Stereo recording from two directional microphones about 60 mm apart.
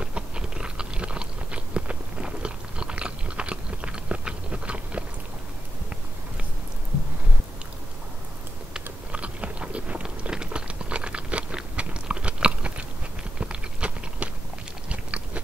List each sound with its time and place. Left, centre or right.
0.0 s biting: centre
8.7 s biting: right
13.4 s a sound: centre
14.9 s chewing: right